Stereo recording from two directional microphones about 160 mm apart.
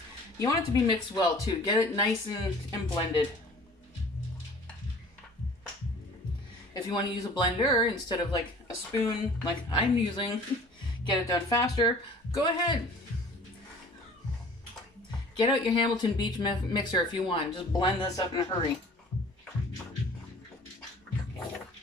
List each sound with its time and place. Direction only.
0.3 s speech: 20° left (ahead or behind)
6.7 s speech: 30° left (ahead or behind)
15.4 s speech: 30° left (ahead or behind)